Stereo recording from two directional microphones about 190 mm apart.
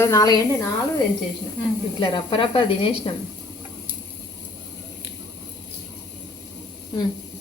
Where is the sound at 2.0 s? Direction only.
25° left (ahead or behind).